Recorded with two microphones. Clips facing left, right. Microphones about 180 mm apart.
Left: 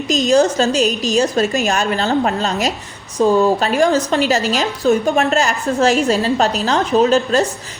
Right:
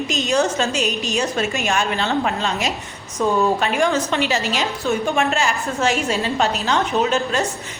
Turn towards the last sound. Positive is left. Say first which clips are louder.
# left 6 dB
turn(degrees=35)  # may be behind; listen again after turning